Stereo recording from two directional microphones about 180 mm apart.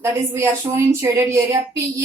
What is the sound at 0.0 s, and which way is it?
A woman's voice, 15° right (ahead or behind).